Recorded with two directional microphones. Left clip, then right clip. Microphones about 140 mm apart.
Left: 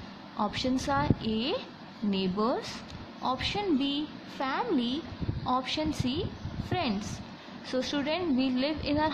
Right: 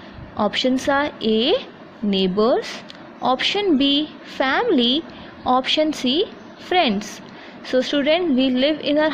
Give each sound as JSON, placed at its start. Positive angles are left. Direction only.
{"t": 0.4, "sound": "a woman's voice", "side_deg": -35}